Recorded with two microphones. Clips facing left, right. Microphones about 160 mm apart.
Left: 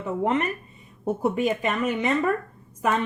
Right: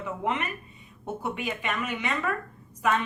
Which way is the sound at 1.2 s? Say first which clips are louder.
Left 9 dB; 35° left (ahead or behind).